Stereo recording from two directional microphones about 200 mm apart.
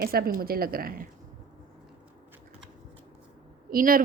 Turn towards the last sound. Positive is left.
turn(degrees=-45)  # may be behind; listen again after turning